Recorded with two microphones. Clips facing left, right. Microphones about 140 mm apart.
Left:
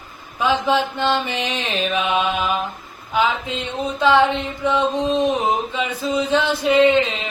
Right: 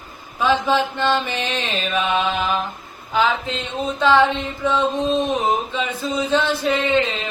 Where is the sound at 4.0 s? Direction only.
15° left (ahead or behind).